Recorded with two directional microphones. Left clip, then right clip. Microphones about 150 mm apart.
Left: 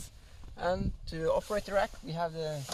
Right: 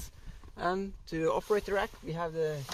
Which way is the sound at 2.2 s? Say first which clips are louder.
Right 2 dB; 55° right (ahead or behind).